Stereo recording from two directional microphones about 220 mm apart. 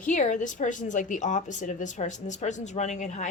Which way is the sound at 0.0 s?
35° left (ahead or behind).